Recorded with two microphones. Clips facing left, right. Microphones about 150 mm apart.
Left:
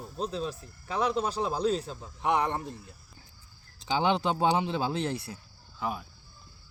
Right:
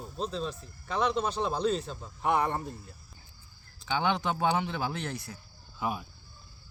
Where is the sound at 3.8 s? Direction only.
30° left (ahead or behind).